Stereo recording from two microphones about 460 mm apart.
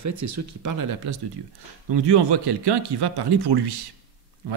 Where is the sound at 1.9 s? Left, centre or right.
Right.